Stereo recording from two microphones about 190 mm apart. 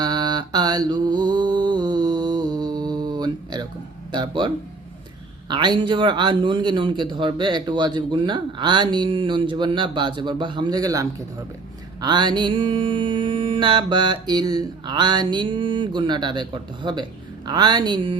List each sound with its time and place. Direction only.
0.0 s mantra: 20° right (ahead or behind)